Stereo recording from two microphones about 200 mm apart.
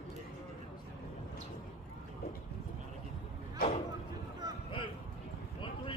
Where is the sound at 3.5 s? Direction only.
40° left (ahead or behind).